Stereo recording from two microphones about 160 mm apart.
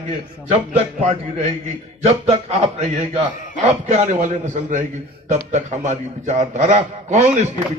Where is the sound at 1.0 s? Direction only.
40° right (ahead or behind).